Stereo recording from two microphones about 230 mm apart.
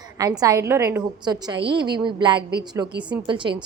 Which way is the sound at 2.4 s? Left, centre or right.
Right.